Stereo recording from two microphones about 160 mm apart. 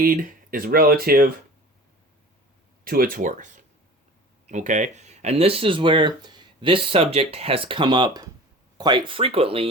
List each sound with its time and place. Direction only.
0.0 s speech: 60° right (ahead or behind)
2.8 s speech: 65° right (ahead or behind); by 9.6 s 35° right (ahead or behind)